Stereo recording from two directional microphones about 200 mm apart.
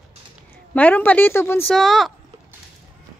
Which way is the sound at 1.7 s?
Centre (ahead or behind).